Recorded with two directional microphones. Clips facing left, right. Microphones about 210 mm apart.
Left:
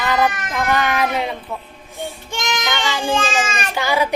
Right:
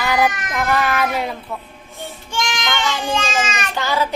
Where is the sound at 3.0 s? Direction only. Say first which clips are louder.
Left 1 dB; 30° left (ahead or behind).